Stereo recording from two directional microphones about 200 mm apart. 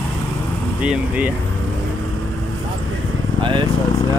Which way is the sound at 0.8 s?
5° right (ahead or behind).